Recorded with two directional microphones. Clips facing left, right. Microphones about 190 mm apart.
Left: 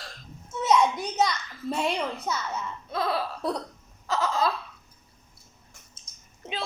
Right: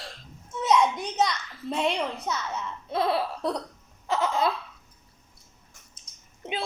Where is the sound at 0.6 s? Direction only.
Centre (ahead or behind).